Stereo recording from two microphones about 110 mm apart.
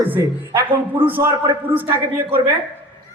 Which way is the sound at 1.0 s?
15° right (ahead or behind).